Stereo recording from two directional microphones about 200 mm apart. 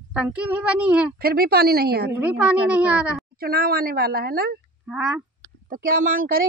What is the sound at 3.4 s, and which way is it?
A woman's voice, 50° right (ahead or behind).